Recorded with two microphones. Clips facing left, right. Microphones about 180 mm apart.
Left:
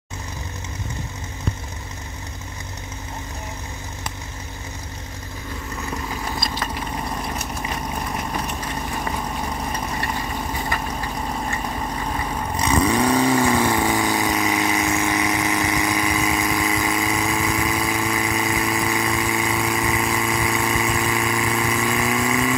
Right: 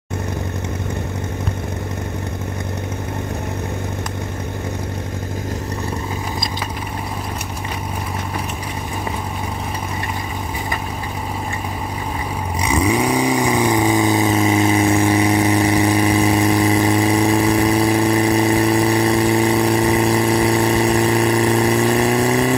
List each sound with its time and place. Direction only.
12.5 s vehicle: 10° right (ahead or behind); by 22.6 s 35° right (ahead or behind)